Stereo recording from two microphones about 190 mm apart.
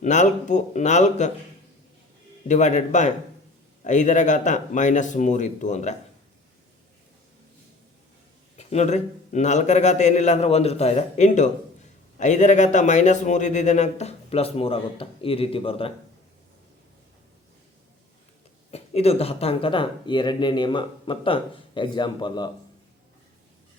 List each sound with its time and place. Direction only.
0.0 s a man's voice: 40° left (ahead or behind)
2.5 s a man's voice: 40° left (ahead or behind)
8.5 s a man's voice: 35° left (ahead or behind)
18.7 s speech: 35° left (ahead or behind)